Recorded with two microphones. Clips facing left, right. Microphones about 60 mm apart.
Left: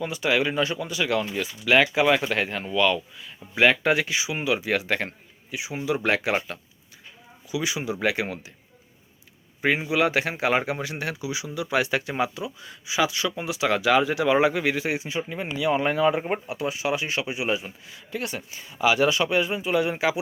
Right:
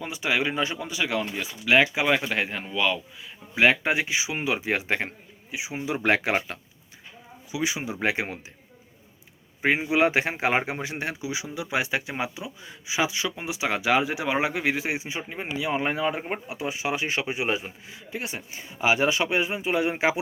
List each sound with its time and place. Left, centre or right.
0.0 s speech: centre
1.4 s speech: centre; by 8.4 s right
9.6 s speech: right
16.1 s speech: centre
16.5 s speech: right
17.9 s speech: centre